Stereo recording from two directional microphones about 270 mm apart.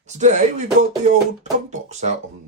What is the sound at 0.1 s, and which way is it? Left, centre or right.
Speech, right.